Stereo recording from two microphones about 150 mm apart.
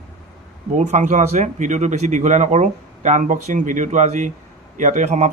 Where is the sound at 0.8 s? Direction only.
50° right (ahead or behind).